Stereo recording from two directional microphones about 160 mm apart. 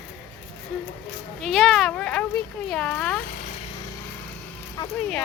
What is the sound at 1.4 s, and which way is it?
Speech, centre (ahead or behind).